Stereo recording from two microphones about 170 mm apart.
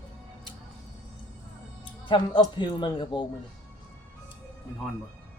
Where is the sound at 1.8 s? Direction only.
30° left (ahead or behind).